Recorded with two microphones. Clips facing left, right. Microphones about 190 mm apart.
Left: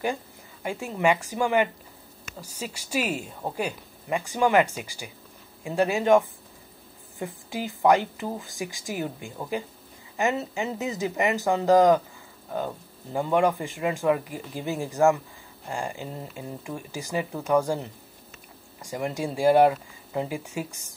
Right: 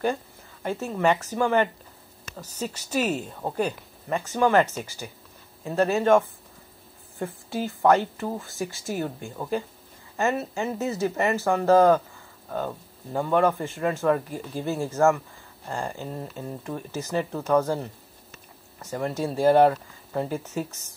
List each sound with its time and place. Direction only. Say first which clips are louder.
0.0 s speech: right 2 dB; 15° left (ahead or behind)
13.1 s speech: right 1 dB; 15° left (ahead or behind)